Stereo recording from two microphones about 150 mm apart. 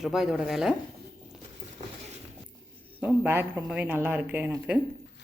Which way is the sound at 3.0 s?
15° right (ahead or behind).